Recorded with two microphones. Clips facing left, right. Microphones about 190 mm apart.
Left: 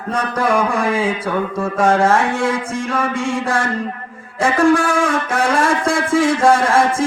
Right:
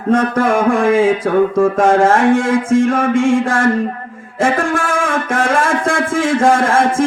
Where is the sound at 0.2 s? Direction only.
50° right (ahead or behind).